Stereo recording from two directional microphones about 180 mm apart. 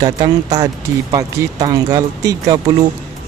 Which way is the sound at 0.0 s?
20° right (ahead or behind).